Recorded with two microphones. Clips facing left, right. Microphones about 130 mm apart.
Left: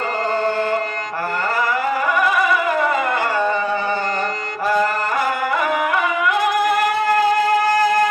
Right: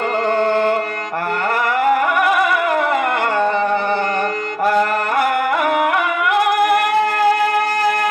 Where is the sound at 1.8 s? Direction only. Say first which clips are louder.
Right 7 dB; 60° right (ahead or behind).